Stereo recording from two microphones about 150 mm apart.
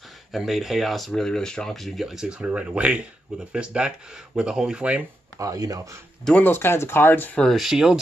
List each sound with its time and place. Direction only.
0.3 s speech: centre (ahead or behind)
5.4 s speech: 25° right (ahead or behind)
6.2 s speech: 10° left (ahead or behind)